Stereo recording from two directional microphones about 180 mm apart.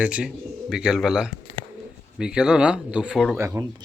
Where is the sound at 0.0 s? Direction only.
5° right (ahead or behind).